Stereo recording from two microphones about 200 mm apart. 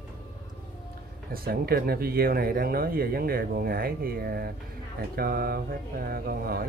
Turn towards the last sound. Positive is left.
turn(degrees=-50)  # may be behind; listen again after turning